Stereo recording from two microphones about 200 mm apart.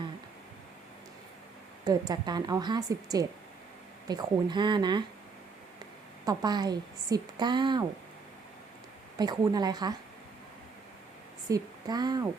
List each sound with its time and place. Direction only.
1.8 s a woman's voice: 20° right (ahead or behind)
6.2 s a woman's voice: 20° right (ahead or behind)
9.1 s a woman's voice: 20° right (ahead or behind)
11.4 s a woman's voice: 20° right (ahead or behind)